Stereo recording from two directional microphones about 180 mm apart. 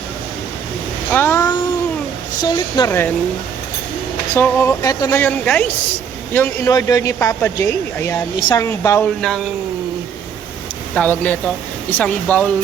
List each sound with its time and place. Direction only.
1.1 s a sound: 15° left (ahead or behind)
2.4 s speech: 25° left (ahead or behind)
4.4 s a woman's voice: 10° left (ahead or behind)
9.0 s speech: 5° left (ahead or behind)
10.9 s a woman's voice: 10° left (ahead or behind)